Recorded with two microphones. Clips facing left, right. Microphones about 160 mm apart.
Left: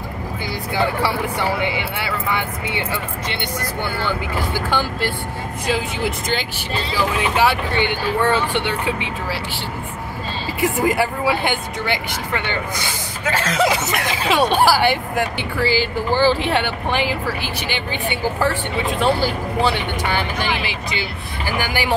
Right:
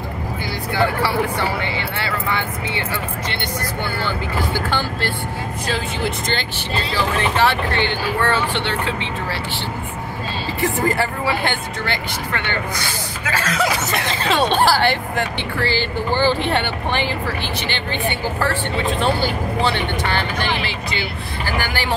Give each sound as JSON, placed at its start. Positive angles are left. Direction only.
{"t": 1.6, "sound": "speech", "side_deg": 15}
{"t": 4.6, "sound": "speech", "side_deg": 10}
{"t": 10.6, "sound": "speech", "side_deg": 10}
{"t": 14.0, "sound": "speech", "side_deg": 10}